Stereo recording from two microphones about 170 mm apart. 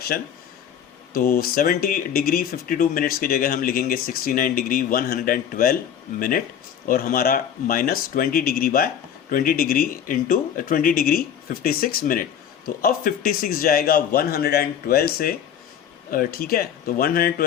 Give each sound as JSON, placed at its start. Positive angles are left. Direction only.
{"t": 0.1, "sound": "speech", "side_deg": 60}